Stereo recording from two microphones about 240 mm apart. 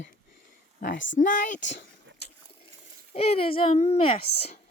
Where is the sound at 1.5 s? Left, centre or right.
Left.